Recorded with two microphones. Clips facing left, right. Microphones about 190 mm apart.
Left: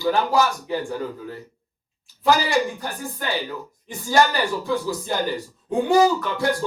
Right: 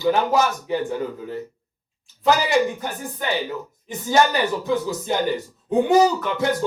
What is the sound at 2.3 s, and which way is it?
Speech, 20° right (ahead or behind).